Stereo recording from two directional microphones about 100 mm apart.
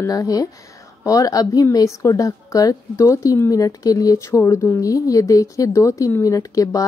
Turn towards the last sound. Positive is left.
turn(degrees=35)  # may be behind; listen again after turning